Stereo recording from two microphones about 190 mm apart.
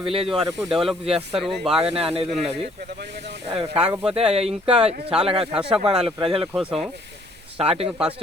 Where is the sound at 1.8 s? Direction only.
30° right (ahead or behind).